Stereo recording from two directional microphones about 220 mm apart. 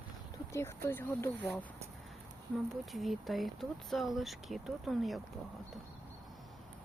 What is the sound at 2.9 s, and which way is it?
Speech, centre (ahead or behind).